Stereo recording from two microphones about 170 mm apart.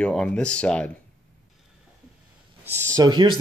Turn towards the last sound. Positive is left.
turn(degrees=-25)  # may be behind; listen again after turning